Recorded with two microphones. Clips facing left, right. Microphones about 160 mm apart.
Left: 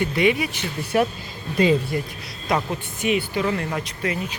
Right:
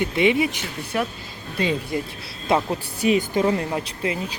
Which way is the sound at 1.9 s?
20° right (ahead or behind).